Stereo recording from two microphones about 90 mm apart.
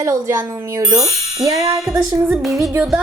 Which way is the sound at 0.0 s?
30° right (ahead or behind).